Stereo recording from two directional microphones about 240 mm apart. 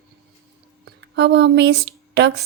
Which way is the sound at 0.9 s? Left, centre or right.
Right.